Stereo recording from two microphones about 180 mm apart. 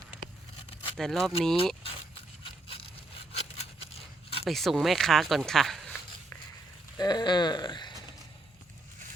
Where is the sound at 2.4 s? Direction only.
30° left (ahead or behind).